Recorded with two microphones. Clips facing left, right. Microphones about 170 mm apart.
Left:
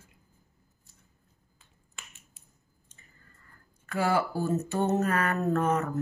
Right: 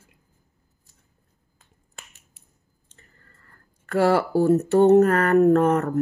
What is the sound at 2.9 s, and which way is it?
Speech, 65° right (ahead or behind).